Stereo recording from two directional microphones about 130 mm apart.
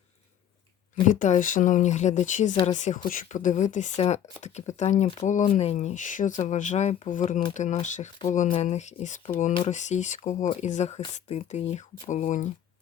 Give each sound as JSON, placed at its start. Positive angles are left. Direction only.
{"t": 1.0, "sound": "speech", "side_deg": 80}
{"t": 3.1, "sound": "speech", "side_deg": 85}
{"t": 4.0, "sound": "speech", "side_deg": 60}
{"t": 5.2, "sound": "speech", "side_deg": 75}
{"t": 5.5, "sound": "speech", "side_deg": 60}
{"t": 7.5, "sound": "speech", "side_deg": 65}